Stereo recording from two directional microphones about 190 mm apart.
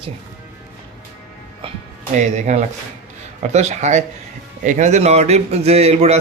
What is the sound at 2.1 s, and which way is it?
A man's voice, 40° right (ahead or behind).